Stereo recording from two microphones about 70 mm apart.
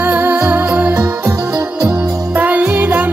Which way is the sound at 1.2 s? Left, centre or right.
Right.